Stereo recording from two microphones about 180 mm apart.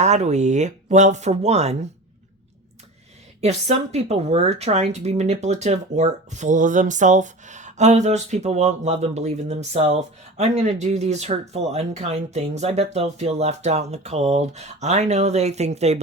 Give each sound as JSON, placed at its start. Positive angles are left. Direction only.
{"t": 0.0, "sound": "speech", "side_deg": -40}
{"t": 3.4, "sound": "speech", "side_deg": -35}